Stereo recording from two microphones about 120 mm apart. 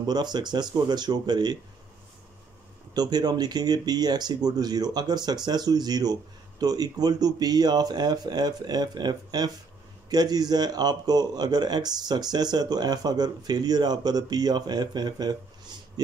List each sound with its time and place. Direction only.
0.0 s a man's voice: 35° right (ahead or behind)
2.9 s a man's voice: 35° right (ahead or behind)